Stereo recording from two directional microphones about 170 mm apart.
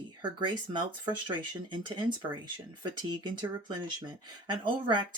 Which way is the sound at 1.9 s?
25° right (ahead or behind).